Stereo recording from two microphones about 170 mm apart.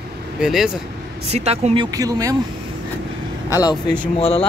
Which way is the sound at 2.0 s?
20° right (ahead or behind).